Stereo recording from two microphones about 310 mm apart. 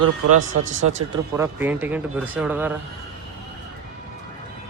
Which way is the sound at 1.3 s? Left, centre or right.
Centre.